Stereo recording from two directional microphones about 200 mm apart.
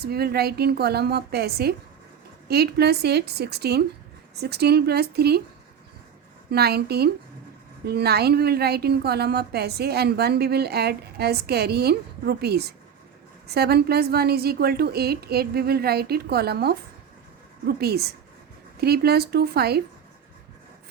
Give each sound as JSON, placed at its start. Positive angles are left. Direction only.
{"t": 0.0, "sound": "a woman's voice", "side_deg": -50}
{"t": 6.5, "sound": "a woman's voice", "side_deg": -55}